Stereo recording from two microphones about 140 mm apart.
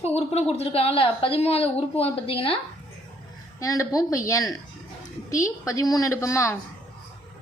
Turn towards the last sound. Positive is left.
turn(degrees=20)  # may be behind; listen again after turning